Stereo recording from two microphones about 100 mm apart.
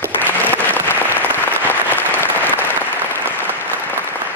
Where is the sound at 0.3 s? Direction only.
20° left (ahead or behind).